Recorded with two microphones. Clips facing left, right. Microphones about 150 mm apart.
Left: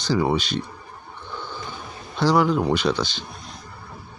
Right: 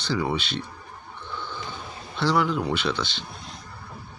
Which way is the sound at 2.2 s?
40° left (ahead or behind).